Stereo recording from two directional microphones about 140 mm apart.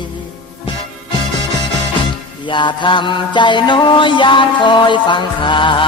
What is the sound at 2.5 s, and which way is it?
Mantra, 35° left (ahead or behind).